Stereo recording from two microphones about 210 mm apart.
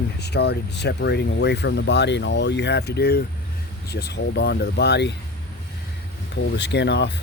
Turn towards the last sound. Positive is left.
turn(degrees=55)  # may be behind; listen again after turning